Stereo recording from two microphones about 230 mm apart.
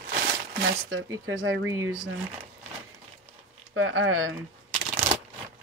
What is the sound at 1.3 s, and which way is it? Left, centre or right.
Speech, right.